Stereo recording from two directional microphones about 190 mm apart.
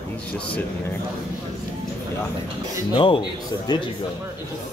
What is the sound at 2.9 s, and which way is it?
Speech, 25° left (ahead or behind).